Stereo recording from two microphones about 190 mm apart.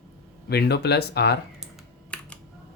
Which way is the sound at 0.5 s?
60° left (ahead or behind).